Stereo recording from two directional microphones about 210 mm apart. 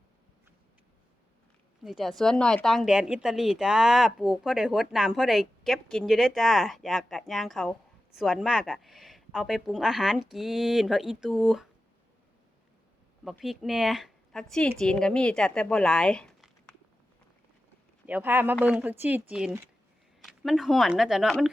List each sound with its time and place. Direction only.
1.8 s speech: centre (ahead or behind)
13.2 s speech: centre (ahead or behind)
18.0 s speech: 10° right (ahead or behind)